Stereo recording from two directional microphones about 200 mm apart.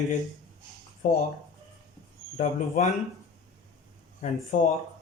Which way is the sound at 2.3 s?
35° left (ahead or behind).